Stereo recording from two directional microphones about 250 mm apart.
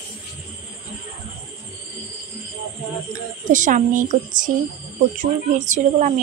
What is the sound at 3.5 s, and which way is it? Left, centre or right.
A woman's voice, right.